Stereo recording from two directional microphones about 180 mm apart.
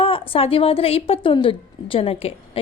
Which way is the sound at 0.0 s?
30° left (ahead or behind).